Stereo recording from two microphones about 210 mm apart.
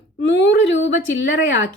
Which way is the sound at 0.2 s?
55° left (ahead or behind).